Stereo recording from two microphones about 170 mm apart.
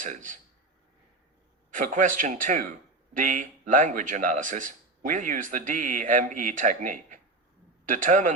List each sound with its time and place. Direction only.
0.0 s speech: 50° right (ahead or behind)
1.7 s speech: 50° right (ahead or behind)